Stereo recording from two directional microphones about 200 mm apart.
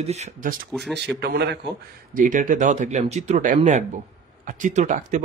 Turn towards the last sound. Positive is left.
turn(degrees=-40)  # may be behind; listen again after turning